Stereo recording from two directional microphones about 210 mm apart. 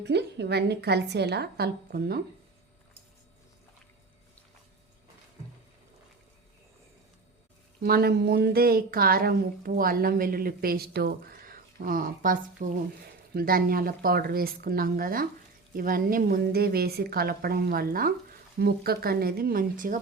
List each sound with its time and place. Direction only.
0.0 s a woman's voice: 55° right (ahead or behind)
7.8 s a woman's voice: 50° right (ahead or behind)